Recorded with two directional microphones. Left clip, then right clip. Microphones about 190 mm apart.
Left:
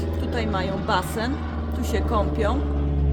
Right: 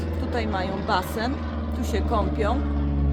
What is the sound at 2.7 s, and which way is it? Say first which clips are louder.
Music: even; 25° right (ahead or behind).